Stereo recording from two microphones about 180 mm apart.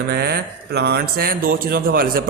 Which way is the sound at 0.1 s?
65° right (ahead or behind).